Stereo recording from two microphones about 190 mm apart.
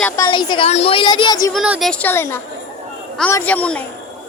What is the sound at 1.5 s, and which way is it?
A woman's voice, centre (ahead or behind).